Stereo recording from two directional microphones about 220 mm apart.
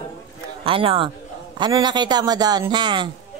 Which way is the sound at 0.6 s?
25° right (ahead or behind).